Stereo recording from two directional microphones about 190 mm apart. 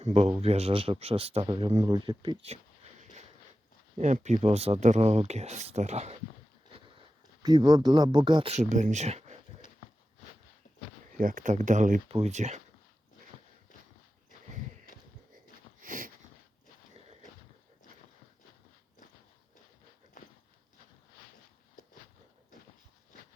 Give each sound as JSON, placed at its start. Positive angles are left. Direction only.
{"t": 0.0, "sound": "speech", "side_deg": -35}
{"t": 2.0, "sound": "a sound", "side_deg": -25}
{"t": 3.9, "sound": "speech", "side_deg": -40}
{"t": 7.4, "sound": "speech", "side_deg": -20}
{"t": 11.2, "sound": "speech", "side_deg": -45}
{"t": 15.8, "sound": "sniff", "side_deg": -45}